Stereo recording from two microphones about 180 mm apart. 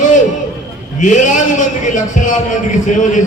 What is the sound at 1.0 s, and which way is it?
A man's voice, 45° left (ahead or behind).